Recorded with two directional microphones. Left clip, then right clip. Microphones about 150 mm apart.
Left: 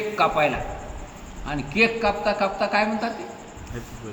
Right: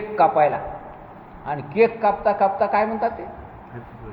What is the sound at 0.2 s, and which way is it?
A woman's voice, 25° right (ahead or behind).